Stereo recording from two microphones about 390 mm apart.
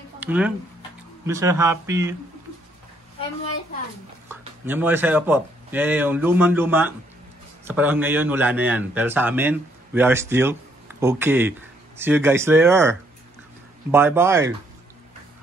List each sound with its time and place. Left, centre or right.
0.2 s a sound: centre
1.2 s a man's voice: centre
4.3 s a man's voice: centre
13.9 s a man's voice: centre